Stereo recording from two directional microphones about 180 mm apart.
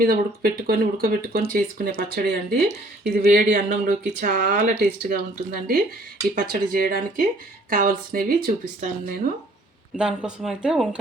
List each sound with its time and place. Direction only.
0.0 s speech: 55° right (ahead or behind)
10.0 s speech: 5° right (ahead or behind)